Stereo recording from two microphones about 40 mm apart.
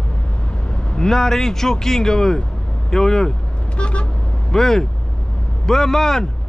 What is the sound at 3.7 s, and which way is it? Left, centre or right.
Vehicle, left.